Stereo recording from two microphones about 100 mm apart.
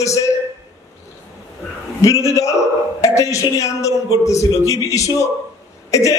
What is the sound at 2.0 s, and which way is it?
A man's voice, 35° left (ahead or behind).